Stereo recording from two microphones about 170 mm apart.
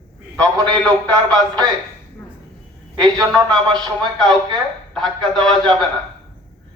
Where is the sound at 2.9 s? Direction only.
25° right (ahead or behind).